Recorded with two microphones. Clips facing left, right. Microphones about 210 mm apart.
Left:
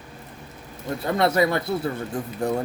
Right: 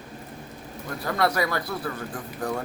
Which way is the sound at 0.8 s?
25° left (ahead or behind).